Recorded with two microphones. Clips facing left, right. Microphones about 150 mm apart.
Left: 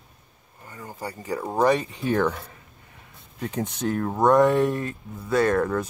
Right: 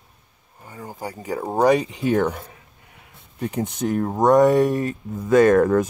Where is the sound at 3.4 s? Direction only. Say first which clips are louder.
Right 3 dB; 10° right (ahead or behind).